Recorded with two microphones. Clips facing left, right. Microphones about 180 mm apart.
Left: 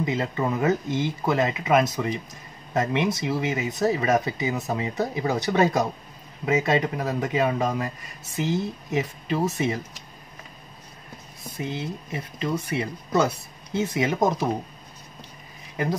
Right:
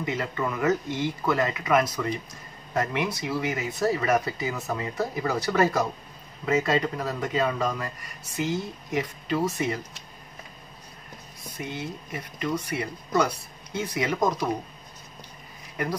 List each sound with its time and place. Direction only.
0.0 s speech: 25° left (ahead or behind)
11.5 s speech: 25° left (ahead or behind)